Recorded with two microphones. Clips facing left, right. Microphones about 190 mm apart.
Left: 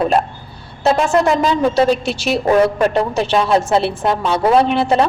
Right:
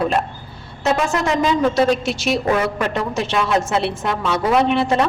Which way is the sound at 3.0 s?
35° left (ahead or behind).